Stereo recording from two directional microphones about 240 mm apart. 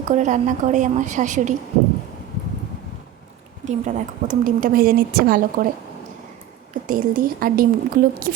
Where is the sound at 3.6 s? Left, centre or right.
Right.